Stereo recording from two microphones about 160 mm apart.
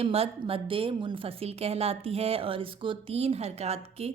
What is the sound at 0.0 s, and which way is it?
Speech, 40° right (ahead or behind).